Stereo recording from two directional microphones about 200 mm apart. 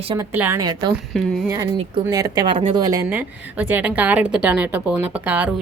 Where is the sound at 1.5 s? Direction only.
20° right (ahead or behind); by 5.5 s 5° right (ahead or behind).